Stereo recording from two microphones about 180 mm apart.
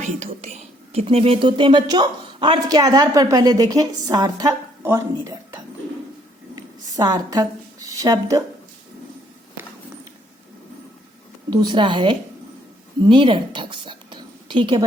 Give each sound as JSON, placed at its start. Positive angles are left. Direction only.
{"t": 0.0, "sound": "speech", "side_deg": -40}
{"t": 6.6, "sound": "a sound", "side_deg": -20}
{"t": 11.5, "sound": "a woman's voice", "side_deg": -25}